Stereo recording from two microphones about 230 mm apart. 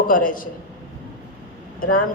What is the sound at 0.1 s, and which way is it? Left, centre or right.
Speech, left.